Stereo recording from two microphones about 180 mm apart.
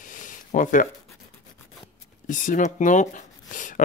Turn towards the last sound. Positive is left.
turn(degrees=45)  # may be behind; listen again after turning